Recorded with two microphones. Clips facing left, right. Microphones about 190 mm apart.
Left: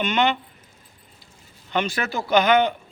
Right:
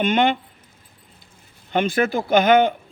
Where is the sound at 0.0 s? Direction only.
50° right (ahead or behind).